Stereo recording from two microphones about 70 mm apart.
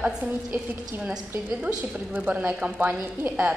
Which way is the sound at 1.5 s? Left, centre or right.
Centre.